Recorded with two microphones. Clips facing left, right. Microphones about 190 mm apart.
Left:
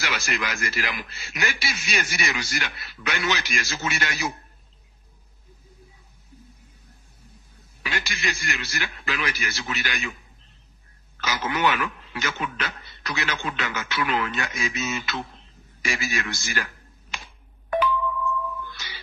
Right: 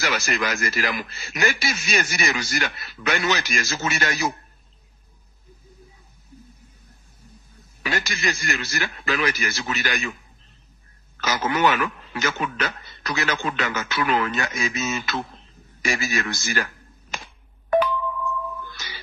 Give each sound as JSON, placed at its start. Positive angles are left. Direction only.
{"t": 0.0, "sound": "a man's voice", "side_deg": -45}
{"t": 7.8, "sound": "a man's voice", "side_deg": -45}
{"t": 11.1, "sound": "a man's voice", "side_deg": -45}
{"t": 17.1, "sound": "telephone dialing", "side_deg": -40}
{"t": 17.6, "sound": "a sound", "side_deg": -40}